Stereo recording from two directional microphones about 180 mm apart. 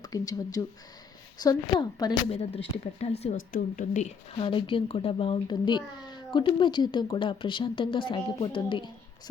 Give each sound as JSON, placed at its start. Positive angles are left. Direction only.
{"t": 0.0, "sound": "speech", "side_deg": 20}
{"t": 2.4, "sound": "speech", "side_deg": 35}
{"t": 3.3, "sound": "speech", "side_deg": 45}